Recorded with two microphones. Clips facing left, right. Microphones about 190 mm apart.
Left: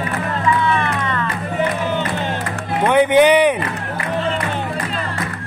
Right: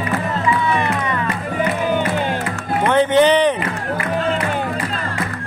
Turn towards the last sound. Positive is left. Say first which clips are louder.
# left 1 dB
turn(degrees=10)  # may be behind; listen again after turning